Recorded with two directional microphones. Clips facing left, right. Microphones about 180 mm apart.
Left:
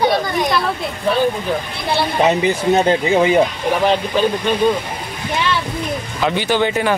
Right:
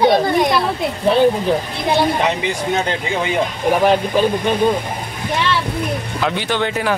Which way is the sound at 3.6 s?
10° right (ahead or behind).